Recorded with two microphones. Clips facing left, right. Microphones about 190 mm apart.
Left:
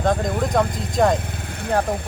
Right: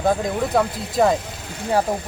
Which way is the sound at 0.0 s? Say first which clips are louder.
Even; 5° right (ahead or behind).